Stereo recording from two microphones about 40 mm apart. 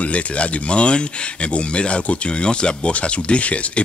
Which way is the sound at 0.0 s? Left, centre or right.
Left.